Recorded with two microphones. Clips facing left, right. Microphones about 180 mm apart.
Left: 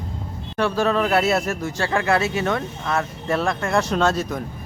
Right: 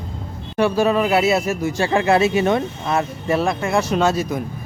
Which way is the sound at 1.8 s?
20° right (ahead or behind).